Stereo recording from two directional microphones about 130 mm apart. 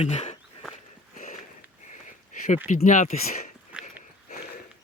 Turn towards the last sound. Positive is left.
turn(degrees=-10)  # may be behind; listen again after turning